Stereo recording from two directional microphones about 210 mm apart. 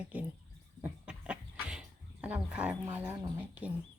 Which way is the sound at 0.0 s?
5° right (ahead or behind).